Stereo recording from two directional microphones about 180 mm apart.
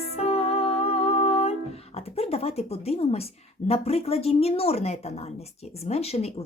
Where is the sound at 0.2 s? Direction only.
35° left (ahead or behind).